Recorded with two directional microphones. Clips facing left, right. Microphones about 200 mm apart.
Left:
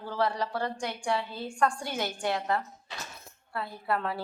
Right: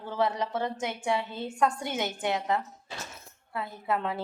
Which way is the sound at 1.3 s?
20° right (ahead or behind).